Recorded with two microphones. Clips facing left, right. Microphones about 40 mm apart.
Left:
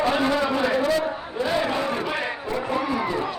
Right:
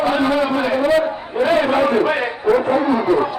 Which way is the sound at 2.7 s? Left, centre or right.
Right.